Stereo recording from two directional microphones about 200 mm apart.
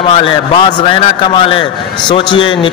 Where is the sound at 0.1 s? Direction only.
25° left (ahead or behind).